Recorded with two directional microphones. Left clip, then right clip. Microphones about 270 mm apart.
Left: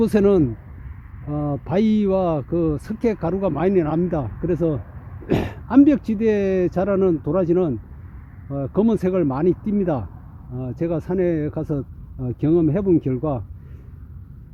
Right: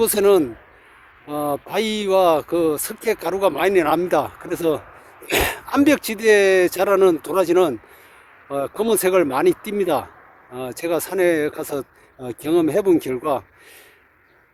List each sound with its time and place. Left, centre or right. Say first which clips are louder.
0.0 s speech: right 2 dB; centre